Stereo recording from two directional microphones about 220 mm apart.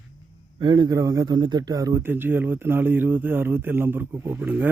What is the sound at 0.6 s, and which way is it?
Speech, 20° right (ahead or behind).